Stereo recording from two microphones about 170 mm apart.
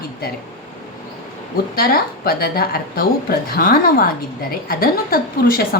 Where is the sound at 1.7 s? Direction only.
60° left (ahead or behind).